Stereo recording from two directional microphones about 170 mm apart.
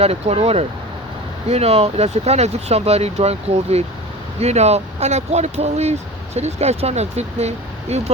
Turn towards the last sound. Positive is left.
turn(degrees=-40)  # may be behind; listen again after turning